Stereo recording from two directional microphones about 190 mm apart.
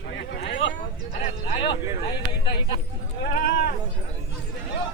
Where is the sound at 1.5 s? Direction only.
30° left (ahead or behind).